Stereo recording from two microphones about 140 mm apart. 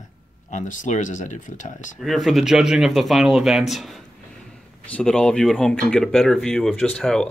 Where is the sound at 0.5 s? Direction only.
60° left (ahead or behind).